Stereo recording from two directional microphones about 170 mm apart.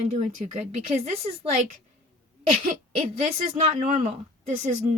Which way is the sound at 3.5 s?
45° right (ahead or behind).